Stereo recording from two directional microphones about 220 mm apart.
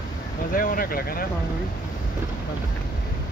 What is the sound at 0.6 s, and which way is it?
Vehicle, 40° left (ahead or behind).